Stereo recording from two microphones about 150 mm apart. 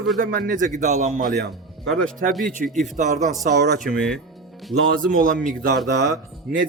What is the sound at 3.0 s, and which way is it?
Speech, 55° right (ahead or behind).